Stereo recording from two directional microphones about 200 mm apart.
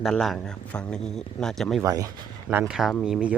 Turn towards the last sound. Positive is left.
turn(degrees=-5)  # may be behind; listen again after turning